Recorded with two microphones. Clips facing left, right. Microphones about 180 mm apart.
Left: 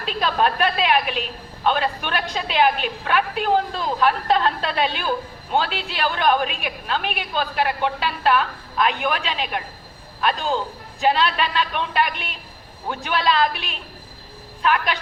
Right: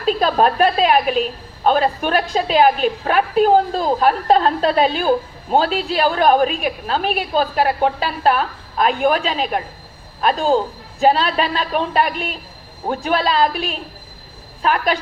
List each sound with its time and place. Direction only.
0.0 s a woman's voice: 40° right (ahead or behind)